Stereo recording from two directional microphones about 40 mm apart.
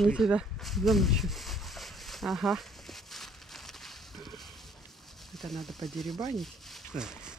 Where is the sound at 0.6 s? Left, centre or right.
Centre.